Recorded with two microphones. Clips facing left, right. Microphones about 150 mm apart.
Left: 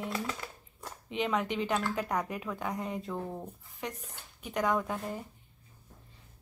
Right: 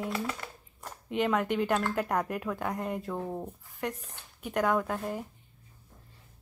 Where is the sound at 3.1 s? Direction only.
15° right (ahead or behind).